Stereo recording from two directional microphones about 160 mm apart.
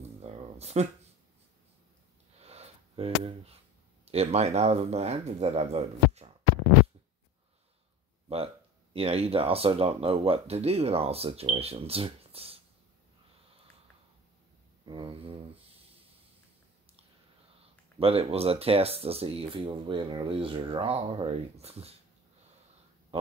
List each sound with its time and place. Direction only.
0.2 s speech: 40° right (ahead or behind)
2.3 s a sound: 40° right (ahead or behind)
4.0 s speech: 40° right (ahead or behind)
8.9 s speech: 40° right (ahead or behind)
14.9 s a sound: 30° right (ahead or behind)
17.9 s speech: 35° right (ahead or behind)